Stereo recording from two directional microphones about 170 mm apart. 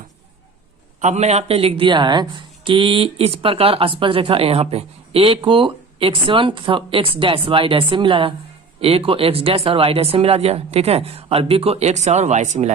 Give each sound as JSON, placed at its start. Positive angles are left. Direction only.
{"t": 1.0, "sound": "speech", "side_deg": -40}